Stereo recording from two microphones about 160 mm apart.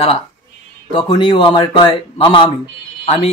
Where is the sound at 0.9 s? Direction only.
30° left (ahead or behind).